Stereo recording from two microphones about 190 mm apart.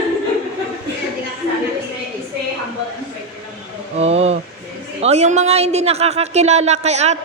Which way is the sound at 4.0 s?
35° right (ahead or behind).